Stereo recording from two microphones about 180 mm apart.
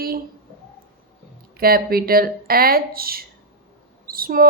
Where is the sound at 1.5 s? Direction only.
55° right (ahead or behind).